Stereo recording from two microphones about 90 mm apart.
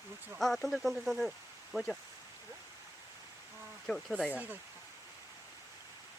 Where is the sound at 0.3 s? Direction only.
Centre (ahead or behind).